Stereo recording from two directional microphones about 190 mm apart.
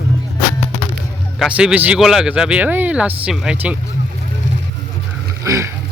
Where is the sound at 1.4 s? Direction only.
5° right (ahead or behind).